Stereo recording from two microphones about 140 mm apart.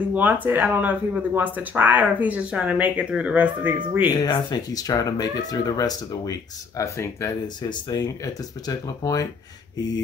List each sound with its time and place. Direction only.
0.1 s speech: 10° right (ahead or behind)
4.1 s speech: 30° left (ahead or behind)